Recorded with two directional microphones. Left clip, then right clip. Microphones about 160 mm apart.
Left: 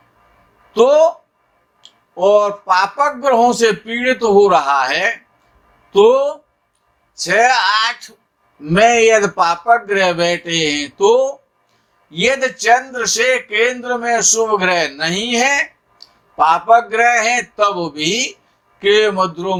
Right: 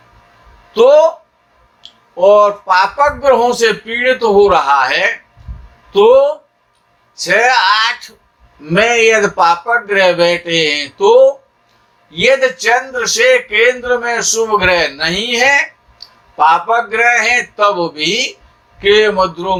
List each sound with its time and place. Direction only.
0.7 s a man's voice: 45° left (ahead or behind)